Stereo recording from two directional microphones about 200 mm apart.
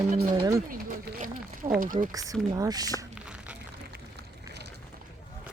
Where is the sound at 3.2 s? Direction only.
5° right (ahead or behind).